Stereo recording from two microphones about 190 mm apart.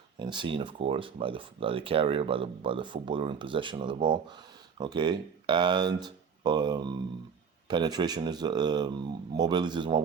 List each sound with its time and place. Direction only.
0.2 s speech: 25° right (ahead or behind)